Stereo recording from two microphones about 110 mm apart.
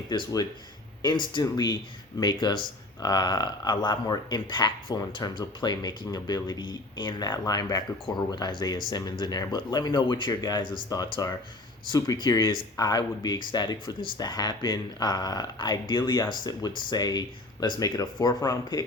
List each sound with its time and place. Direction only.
0.1 s speech: 35° left (ahead or behind)